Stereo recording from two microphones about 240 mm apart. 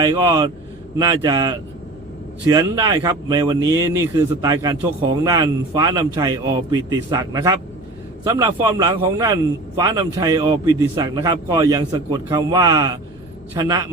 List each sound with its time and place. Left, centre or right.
0.0 s speech: centre